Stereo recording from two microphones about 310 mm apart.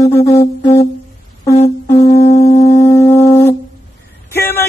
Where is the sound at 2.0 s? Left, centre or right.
Left.